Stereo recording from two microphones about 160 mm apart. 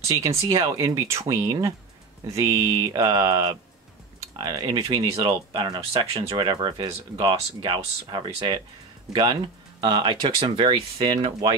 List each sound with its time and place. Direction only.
0.4 s speech: 20° right (ahead or behind)